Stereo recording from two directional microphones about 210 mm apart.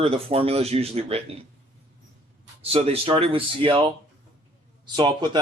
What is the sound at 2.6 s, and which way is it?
A man's voice, 30° right (ahead or behind).